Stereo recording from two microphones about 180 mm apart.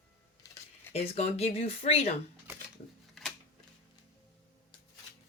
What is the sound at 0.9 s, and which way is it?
Speech, 35° left (ahead or behind).